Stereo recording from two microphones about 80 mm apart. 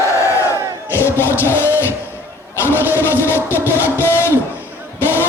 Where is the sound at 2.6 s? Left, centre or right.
Left.